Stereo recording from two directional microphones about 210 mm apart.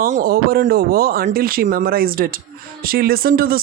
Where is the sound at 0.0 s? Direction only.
45° right (ahead or behind).